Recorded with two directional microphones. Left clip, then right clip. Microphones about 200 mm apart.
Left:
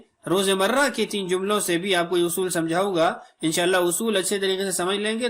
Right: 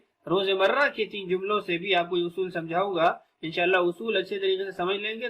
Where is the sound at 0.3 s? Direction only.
50° left (ahead or behind).